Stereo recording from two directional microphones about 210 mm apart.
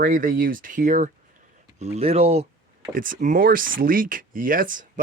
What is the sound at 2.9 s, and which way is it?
Speech, 40° right (ahead or behind).